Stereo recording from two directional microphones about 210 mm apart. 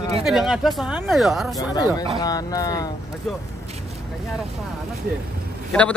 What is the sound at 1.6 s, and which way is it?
Speech, 20° left (ahead or behind).